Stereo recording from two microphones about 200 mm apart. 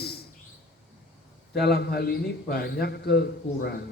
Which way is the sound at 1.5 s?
55° left (ahead or behind).